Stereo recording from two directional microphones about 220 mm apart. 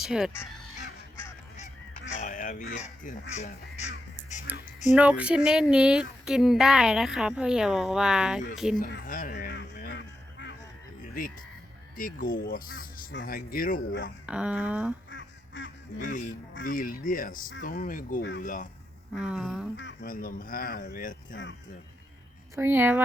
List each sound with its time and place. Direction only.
0.0 s speech: centre (ahead or behind)
1.5 s goose: 35° left (ahead or behind)
2.7 s speech: 35° left (ahead or behind)
4.5 s speech: 10° right (ahead or behind)
9.0 s honk: 40° left (ahead or behind)
11.0 s speech: 40° left (ahead or behind)
14.3 s speech: 5° right (ahead or behind)
15.1 s honk: 55° left (ahead or behind)
16.6 s speech: 40° left (ahead or behind)
18.2 s speech: 55° left (ahead or behind)
18.4 s speech: 35° left (ahead or behind)
19.1 s speech: 5° right (ahead or behind)
19.7 s speech: 55° left (ahead or behind); by 21.3 s 40° left (ahead or behind)
22.5 s speech: 10° right (ahead or behind)